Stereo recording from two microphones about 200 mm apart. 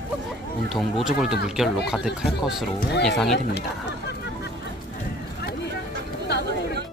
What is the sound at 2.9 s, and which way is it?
Speech, 55° left (ahead or behind).